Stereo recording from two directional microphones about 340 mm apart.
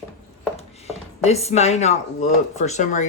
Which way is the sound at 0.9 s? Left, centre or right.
Centre.